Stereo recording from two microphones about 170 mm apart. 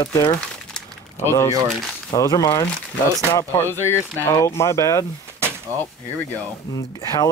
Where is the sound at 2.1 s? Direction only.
20° left (ahead or behind).